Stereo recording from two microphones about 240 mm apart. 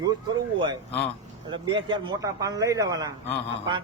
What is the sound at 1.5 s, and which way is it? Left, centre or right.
A man's voice, centre.